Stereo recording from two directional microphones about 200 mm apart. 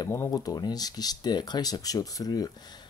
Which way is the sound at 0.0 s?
15° left (ahead or behind).